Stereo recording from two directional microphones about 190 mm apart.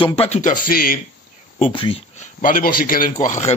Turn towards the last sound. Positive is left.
turn(degrees=40)  # may be behind; listen again after turning